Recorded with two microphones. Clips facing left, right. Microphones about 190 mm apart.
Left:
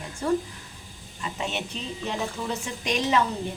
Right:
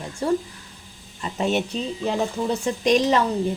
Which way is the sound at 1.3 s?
45° right (ahead or behind).